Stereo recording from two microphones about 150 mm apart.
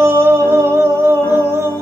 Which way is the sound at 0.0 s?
15° right (ahead or behind).